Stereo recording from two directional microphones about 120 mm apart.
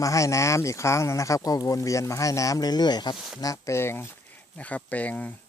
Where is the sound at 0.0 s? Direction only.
25° left (ahead or behind).